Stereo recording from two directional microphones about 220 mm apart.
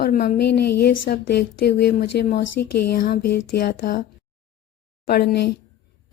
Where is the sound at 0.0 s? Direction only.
40° left (ahead or behind).